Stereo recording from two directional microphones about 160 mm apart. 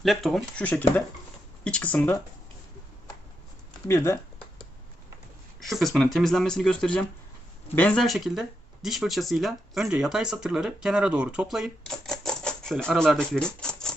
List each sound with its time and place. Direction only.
0.0 s speech: centre (ahead or behind)
3.8 s speech: 15° left (ahead or behind)
5.5 s speech: centre (ahead or behind)